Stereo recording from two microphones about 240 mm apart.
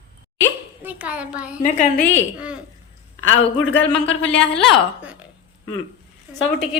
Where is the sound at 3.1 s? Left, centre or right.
Left.